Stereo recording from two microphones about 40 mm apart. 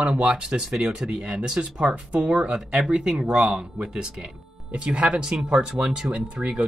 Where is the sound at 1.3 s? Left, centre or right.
Right.